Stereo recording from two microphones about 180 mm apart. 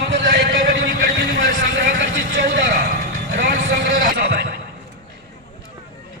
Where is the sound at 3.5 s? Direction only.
90° right.